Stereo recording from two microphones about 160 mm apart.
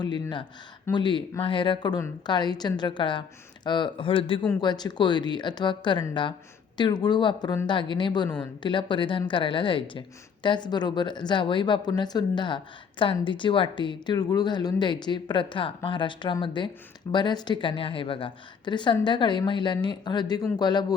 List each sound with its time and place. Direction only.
0.0 s a woman's voice: 30° left (ahead or behind)